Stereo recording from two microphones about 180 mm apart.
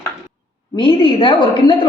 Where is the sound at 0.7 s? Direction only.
25° left (ahead or behind).